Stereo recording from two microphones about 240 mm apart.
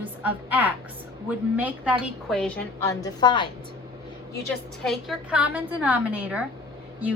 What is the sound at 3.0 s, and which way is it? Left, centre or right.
Speech, centre.